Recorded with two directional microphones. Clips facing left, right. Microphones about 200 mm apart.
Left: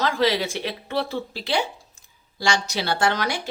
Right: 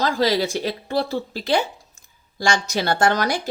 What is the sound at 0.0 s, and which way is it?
A woman's voice, 40° right (ahead or behind).